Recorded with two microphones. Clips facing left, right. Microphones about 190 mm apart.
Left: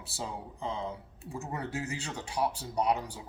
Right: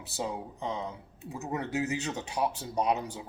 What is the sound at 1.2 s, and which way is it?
Speech, 20° right (ahead or behind).